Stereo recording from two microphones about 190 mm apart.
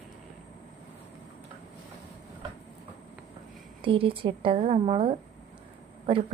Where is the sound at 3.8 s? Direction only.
30° right (ahead or behind).